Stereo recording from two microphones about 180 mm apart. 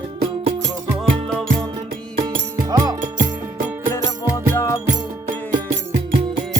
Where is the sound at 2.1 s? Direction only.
25° right (ahead or behind).